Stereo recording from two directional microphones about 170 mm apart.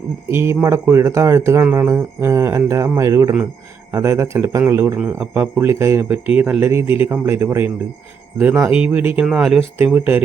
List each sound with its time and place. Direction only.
0.3 s speech: 15° right (ahead or behind)